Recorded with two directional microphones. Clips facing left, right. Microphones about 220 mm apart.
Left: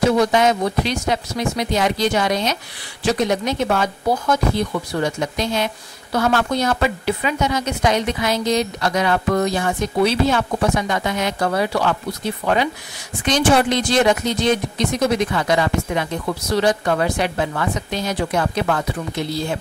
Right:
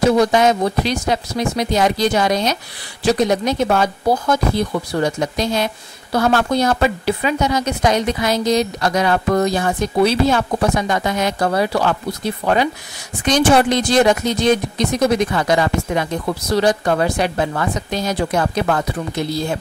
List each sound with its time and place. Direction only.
0.2 s speech: 35° right (ahead or behind)
13.2 s speech: 40° right (ahead or behind)